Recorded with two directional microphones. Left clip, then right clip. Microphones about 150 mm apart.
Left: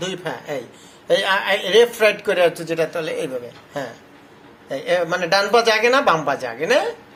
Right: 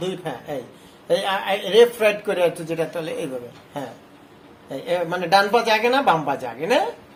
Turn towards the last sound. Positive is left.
turn(degrees=-10)  # may be behind; listen again after turning